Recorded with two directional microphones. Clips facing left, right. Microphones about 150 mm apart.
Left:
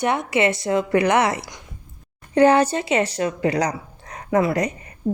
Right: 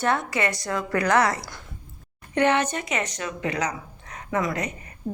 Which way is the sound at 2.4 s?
35° left (ahead or behind).